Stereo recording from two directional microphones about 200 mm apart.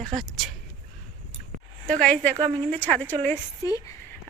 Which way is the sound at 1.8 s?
5° left (ahead or behind).